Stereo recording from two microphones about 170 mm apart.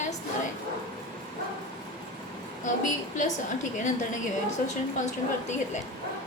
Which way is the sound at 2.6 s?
45° left (ahead or behind).